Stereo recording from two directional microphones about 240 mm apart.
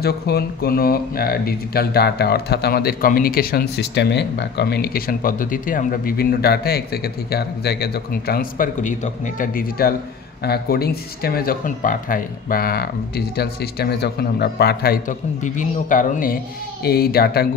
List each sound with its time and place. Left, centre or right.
0.0 s speech: left